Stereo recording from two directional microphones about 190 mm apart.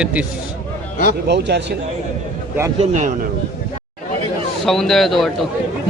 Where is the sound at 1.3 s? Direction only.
65° right (ahead or behind).